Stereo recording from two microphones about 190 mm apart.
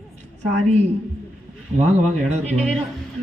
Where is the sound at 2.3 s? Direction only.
35° right (ahead or behind).